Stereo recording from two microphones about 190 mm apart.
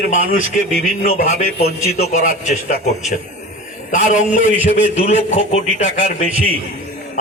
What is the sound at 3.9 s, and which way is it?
A man's voice, 40° left (ahead or behind).